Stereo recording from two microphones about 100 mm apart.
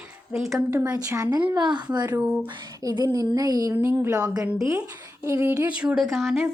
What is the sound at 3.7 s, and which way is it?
A woman's voice, 25° right (ahead or behind).